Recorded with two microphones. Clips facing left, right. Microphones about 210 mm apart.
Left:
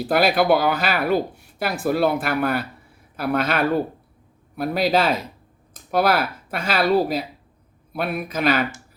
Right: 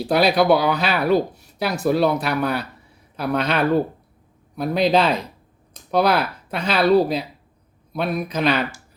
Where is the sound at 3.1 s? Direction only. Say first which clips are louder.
Even; 5° left (ahead or behind).